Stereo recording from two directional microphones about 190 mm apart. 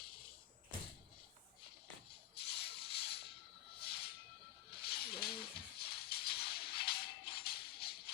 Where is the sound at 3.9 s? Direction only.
55° left (ahead or behind).